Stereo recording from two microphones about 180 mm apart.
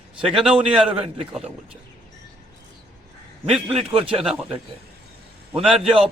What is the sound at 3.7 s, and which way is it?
Speech, 30° right (ahead or behind).